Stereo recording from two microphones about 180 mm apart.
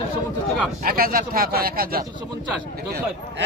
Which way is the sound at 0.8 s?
55° right (ahead or behind).